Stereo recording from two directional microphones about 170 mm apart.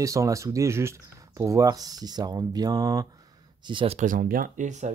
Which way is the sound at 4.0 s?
50° right (ahead or behind).